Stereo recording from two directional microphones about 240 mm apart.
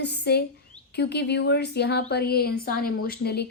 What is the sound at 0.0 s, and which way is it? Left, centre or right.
A woman's voice, left.